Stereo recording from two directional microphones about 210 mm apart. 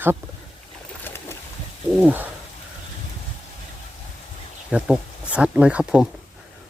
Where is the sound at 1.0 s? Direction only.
10° left (ahead or behind).